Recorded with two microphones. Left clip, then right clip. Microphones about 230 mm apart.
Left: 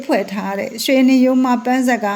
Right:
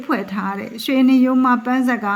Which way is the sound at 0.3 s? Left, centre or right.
Right.